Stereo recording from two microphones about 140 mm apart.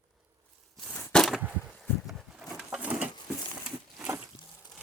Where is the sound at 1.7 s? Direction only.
5° left (ahead or behind).